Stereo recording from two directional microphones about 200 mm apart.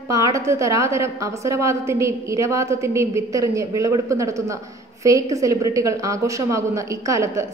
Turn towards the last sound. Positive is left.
turn(degrees=-15)  # may be behind; listen again after turning